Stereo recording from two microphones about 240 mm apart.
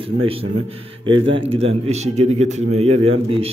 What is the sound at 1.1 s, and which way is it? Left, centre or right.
A man's voice, right.